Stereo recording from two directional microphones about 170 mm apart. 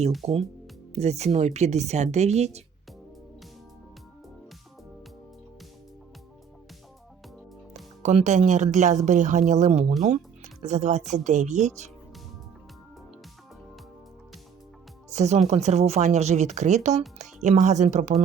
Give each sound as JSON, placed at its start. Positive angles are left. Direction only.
{"t": 0.2, "sound": "speech", "side_deg": -35}
{"t": 8.0, "sound": "speech", "side_deg": -45}
{"t": 15.1, "sound": "speech", "side_deg": -40}